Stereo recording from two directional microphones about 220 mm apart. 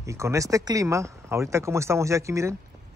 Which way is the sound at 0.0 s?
15° right (ahead or behind).